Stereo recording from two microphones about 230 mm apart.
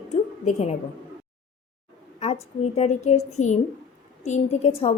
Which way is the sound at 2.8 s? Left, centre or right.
Left.